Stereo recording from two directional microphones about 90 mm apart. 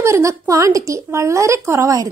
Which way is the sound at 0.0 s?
35° right (ahead or behind).